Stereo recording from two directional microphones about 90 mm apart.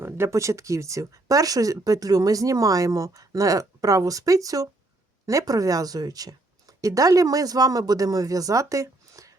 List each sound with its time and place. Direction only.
0.0 s speech: 30° right (ahead or behind)